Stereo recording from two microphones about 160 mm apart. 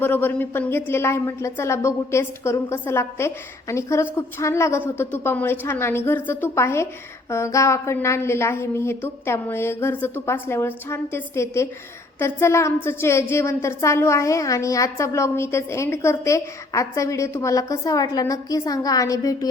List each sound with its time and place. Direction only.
0.0 s a woman's voice: 15° left (ahead or behind)